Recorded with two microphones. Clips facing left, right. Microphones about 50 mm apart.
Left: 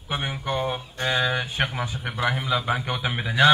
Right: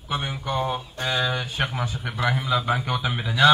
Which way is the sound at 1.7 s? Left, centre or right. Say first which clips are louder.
Even; centre.